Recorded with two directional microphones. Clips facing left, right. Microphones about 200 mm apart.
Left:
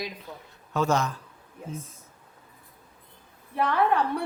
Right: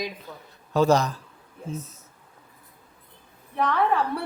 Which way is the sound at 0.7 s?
35° right (ahead or behind).